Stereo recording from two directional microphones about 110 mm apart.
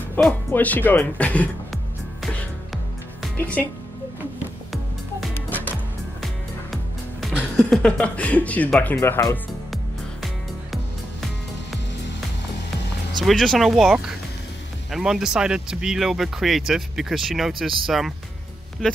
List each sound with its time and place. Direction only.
0.1 s speech: 15° left (ahead or behind)
3.3 s a woman's voice: 15° left (ahead or behind)
5.3 s music: 15° left (ahead or behind)
6.2 s music: centre (ahead or behind)
7.7 s speech: 10° left (ahead or behind)
8.9 s speech: 25° left (ahead or behind)
10.2 s music: centre (ahead or behind)
13.2 s speech: centre (ahead or behind)